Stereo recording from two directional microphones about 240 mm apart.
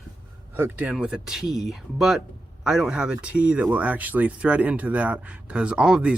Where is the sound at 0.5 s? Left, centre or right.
Centre.